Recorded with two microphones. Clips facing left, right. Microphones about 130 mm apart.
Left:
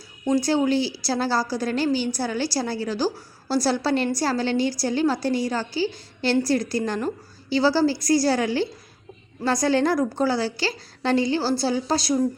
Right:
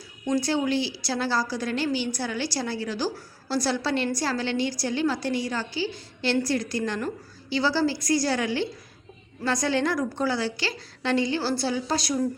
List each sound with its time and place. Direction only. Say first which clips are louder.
0.3 s a woman's voice: left 4 dB; 35° left (ahead or behind)